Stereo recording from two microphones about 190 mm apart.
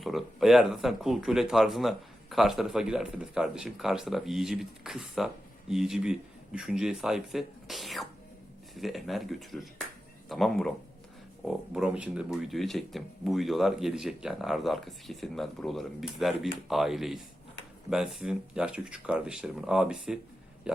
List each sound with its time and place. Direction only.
0.0 s speech: centre (ahead or behind)